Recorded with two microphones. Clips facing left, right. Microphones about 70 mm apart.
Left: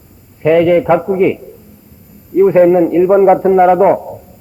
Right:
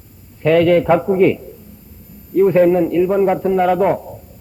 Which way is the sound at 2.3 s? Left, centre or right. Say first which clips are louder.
Left 4 dB; centre.